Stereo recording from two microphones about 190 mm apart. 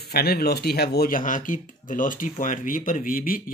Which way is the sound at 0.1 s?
55° left (ahead or behind).